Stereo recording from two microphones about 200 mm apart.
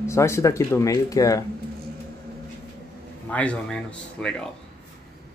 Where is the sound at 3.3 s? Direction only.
5° left (ahead or behind).